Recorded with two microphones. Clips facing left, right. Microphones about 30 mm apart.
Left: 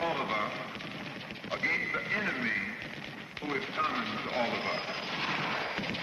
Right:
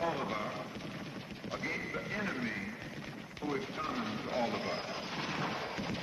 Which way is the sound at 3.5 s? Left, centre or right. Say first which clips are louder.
Left 5 dB; left.